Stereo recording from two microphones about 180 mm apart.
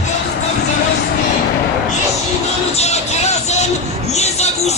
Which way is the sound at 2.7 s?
35° left (ahead or behind).